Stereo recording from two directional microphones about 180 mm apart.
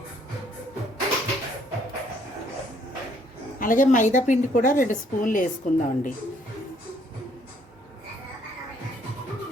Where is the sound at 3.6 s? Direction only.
45° left (ahead or behind).